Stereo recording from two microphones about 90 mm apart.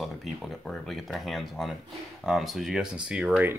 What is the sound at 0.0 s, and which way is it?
Speech, centre (ahead or behind).